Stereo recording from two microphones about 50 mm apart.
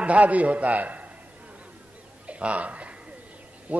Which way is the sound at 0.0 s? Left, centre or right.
Right.